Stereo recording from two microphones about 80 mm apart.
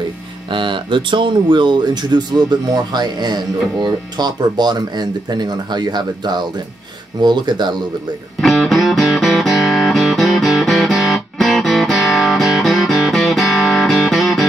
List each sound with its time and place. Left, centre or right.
0.5 s speech: right
8.4 s music: centre